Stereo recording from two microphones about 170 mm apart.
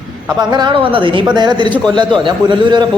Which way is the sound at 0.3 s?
25° right (ahead or behind).